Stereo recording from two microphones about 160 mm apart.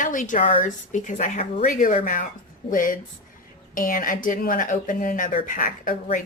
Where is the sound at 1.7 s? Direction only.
55° left (ahead or behind).